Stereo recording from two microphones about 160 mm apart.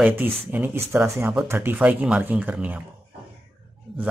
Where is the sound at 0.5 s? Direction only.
15° right (ahead or behind).